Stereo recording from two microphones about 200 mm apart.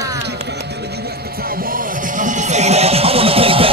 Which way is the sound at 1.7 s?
40° right (ahead or behind).